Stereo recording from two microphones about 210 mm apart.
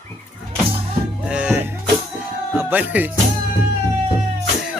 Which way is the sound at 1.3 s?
5° right (ahead or behind).